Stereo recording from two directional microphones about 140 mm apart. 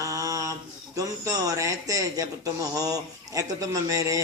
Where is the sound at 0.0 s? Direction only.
25° right (ahead or behind).